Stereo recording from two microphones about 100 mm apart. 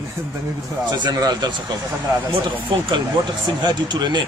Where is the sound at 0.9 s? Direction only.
45° right (ahead or behind).